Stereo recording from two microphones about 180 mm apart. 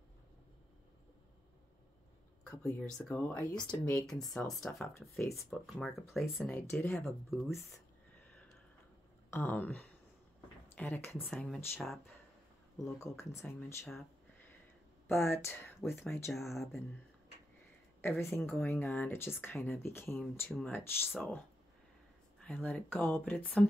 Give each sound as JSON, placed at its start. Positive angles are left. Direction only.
{"t": 2.6, "sound": "speech", "side_deg": 10}
{"t": 5.2, "sound": "speech", "side_deg": 15}
{"t": 5.5, "sound": "speech", "side_deg": 0}
{"t": 9.3, "sound": "speech", "side_deg": 10}
{"t": 12.7, "sound": "speech", "side_deg": 15}
{"t": 16.0, "sound": "speech", "side_deg": 0}
{"t": 18.0, "sound": "speech", "side_deg": 15}